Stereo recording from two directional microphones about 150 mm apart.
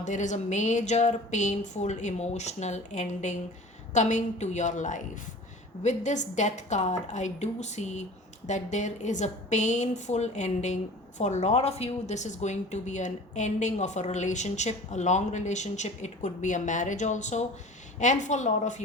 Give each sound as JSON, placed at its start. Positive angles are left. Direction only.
{"t": 0.0, "sound": "a woman's voice", "side_deg": 55}